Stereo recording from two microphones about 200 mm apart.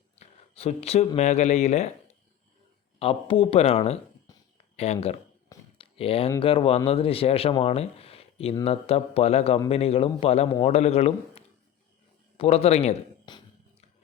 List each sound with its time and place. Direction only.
0.2 s speech: 30° left (ahead or behind)
3.0 s speech: 25° left (ahead or behind)
5.7 s a sound: 30° left (ahead or behind)
6.4 s a man's voice: 25° left (ahead or behind)